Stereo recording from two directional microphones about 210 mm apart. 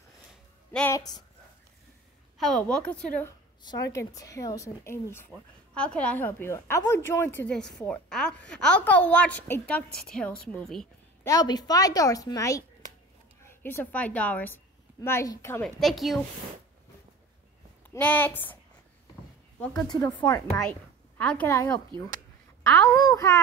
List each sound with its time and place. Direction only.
0.7 s a woman's voice: 15° left (ahead or behind)
2.3 s a woman's voice: centre (ahead or behind)
11.2 s a woman's voice: 20° left (ahead or behind)
15.8 s a woman's voice: centre (ahead or behind)
17.9 s a woman's voice: 10° left (ahead or behind)
19.6 s a woman's voice: 5° left (ahead or behind)
19.9 s speech: 20° left (ahead or behind)
21.2 s a woman's voice: 5° left (ahead or behind)